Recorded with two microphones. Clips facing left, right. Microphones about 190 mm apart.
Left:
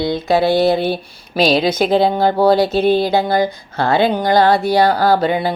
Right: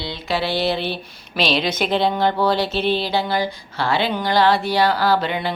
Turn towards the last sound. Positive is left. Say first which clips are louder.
# left 5 dB
turn(degrees=40)  # may be behind; listen again after turning